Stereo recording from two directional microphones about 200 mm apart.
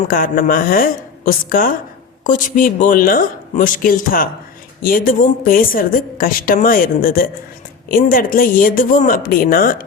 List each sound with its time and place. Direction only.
0.1 s a woman's voice: 45° left (ahead or behind)